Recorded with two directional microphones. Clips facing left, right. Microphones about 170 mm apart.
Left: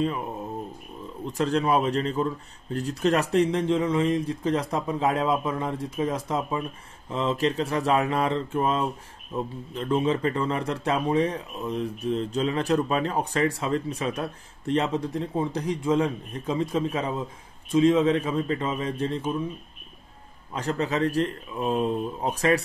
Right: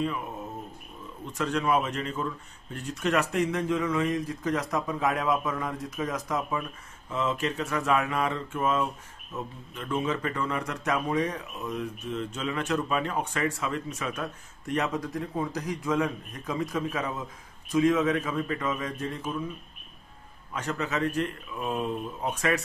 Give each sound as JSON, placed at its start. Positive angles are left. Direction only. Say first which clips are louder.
{"t": 1.2, "sound": "speech", "louder": "left 4 dB", "side_deg": 35}
{"t": 20.5, "sound": "speech", "louder": "left 4 dB", "side_deg": 35}